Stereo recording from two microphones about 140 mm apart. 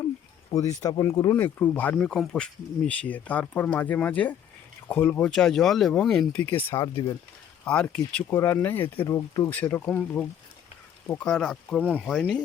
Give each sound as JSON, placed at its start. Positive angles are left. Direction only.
{"t": 0.5, "sound": "speech", "side_deg": 25}
{"t": 1.3, "sound": "speech", "side_deg": 15}
{"t": 5.3, "sound": "speech", "side_deg": 5}
{"t": 6.7, "sound": "speech", "side_deg": 35}
{"t": 7.6, "sound": "speech", "side_deg": 10}
{"t": 8.3, "sound": "speech", "side_deg": 20}
{"t": 9.5, "sound": "speech", "side_deg": 10}